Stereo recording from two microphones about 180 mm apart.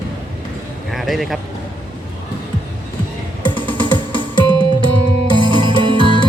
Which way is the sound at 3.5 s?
25° left (ahead or behind).